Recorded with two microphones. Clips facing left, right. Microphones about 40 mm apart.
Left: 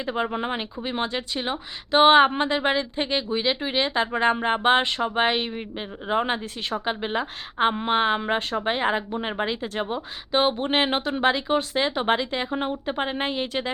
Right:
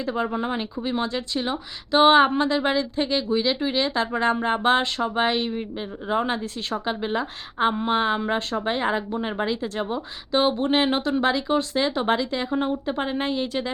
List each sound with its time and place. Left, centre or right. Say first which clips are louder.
0.0 s speech: right 1 dB; left